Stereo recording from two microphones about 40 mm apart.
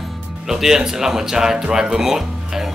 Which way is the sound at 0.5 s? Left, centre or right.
Centre.